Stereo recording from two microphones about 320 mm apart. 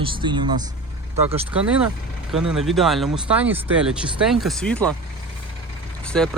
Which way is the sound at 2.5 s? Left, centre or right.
Centre.